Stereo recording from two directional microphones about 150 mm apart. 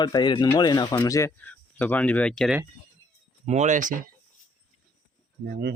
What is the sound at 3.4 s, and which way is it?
Speech, 50° right (ahead or behind).